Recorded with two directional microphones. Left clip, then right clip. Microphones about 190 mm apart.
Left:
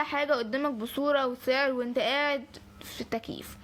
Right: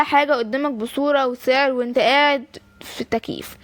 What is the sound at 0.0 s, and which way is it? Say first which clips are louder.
A woman's voice: right 11 dB; 45° right (ahead or behind).